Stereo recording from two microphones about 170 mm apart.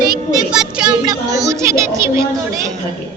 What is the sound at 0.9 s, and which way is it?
Speech, 20° right (ahead or behind).